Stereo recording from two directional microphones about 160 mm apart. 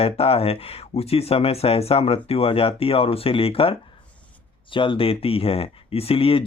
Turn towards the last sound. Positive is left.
turn(degrees=35)  # may be behind; listen again after turning